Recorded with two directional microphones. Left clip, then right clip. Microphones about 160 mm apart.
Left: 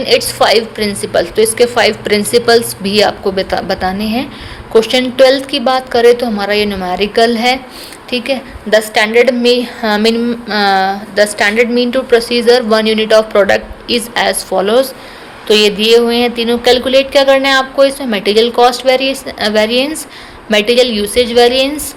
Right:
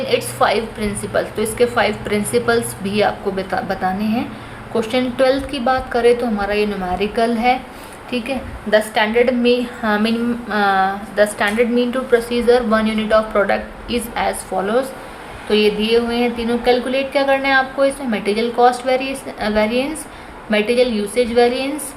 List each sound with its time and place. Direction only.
0.3 s a woman's voice: 35° left (ahead or behind)